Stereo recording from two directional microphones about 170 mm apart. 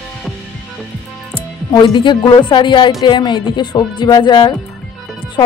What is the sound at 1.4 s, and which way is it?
Speech, 30° left (ahead or behind).